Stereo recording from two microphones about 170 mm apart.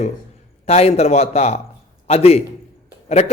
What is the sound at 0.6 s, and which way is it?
A man's voice, 40° left (ahead or behind).